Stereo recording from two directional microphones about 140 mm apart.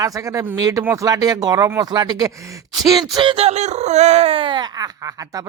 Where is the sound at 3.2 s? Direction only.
40° right (ahead or behind); by 5.4 s 25° right (ahead or behind).